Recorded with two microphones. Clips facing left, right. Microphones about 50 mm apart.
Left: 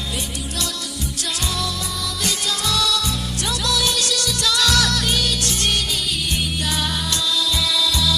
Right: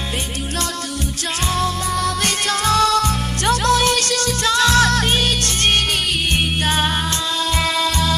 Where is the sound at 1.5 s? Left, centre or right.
Right.